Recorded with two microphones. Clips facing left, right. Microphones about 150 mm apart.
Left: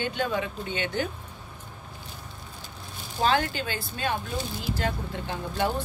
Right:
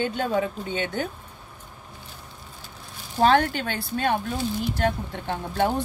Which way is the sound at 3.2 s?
60° right (ahead or behind).